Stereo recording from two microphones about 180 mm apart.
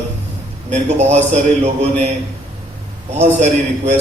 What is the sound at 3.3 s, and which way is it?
Speech, 40° right (ahead or behind).